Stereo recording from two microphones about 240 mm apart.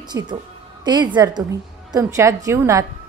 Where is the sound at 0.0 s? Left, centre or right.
Centre.